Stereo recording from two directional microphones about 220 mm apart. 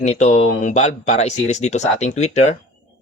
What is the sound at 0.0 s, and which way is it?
Speech, 30° left (ahead or behind).